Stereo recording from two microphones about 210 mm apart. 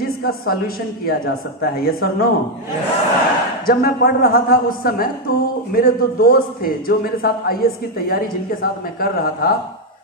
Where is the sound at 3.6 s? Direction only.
45° left (ahead or behind).